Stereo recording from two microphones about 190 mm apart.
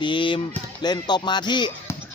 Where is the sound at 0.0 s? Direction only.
25° left (ahead or behind).